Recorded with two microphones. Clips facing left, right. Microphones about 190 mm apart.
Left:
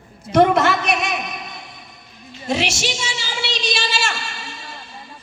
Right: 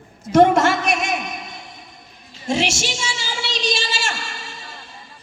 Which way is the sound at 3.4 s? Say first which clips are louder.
Right 1 dB; 50° right (ahead or behind).